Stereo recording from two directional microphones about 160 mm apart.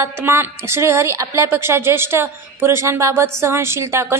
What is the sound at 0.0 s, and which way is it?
A woman's voice, 15° right (ahead or behind).